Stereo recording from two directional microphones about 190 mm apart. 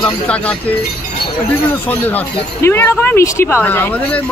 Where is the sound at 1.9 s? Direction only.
10° left (ahead or behind).